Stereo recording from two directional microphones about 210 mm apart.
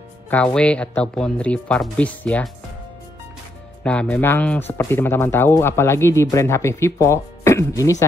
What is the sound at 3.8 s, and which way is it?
Speech, 5° left (ahead or behind).